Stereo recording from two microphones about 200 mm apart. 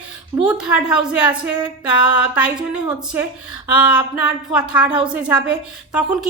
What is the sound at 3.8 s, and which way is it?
A woman's voice, 5° right (ahead or behind).